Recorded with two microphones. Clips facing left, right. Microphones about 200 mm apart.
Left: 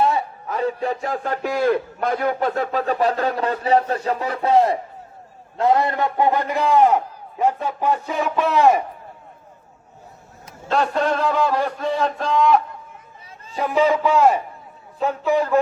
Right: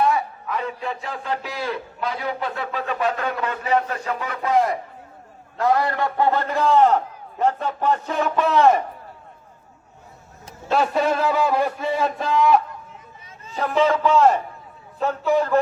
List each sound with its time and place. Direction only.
0.0 s a man's voice: 30° left (ahead or behind); by 8.8 s 10° left (ahead or behind)
10.7 s a man's voice: 5° right (ahead or behind)
13.6 s a man's voice: 10° left (ahead or behind)